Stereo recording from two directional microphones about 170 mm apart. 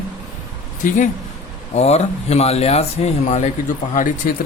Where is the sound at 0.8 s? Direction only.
50° left (ahead or behind).